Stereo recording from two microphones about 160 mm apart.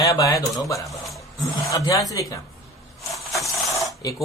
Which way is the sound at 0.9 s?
Centre (ahead or behind).